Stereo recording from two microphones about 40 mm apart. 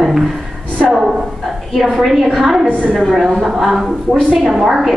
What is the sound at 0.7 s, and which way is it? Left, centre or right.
Speech, right.